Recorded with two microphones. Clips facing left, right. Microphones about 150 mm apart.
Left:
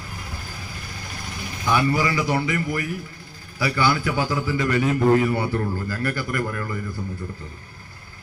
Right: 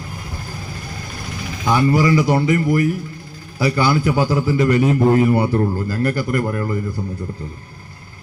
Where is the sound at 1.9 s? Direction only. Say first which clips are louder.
Right 7 dB; 40° right (ahead or behind).